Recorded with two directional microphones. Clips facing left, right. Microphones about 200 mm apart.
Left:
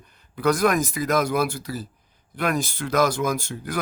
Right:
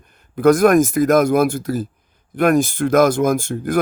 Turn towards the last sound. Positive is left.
turn(degrees=-50)  # may be behind; listen again after turning